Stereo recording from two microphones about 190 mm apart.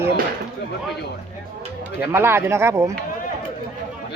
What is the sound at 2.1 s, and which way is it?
Speech, 15° right (ahead or behind).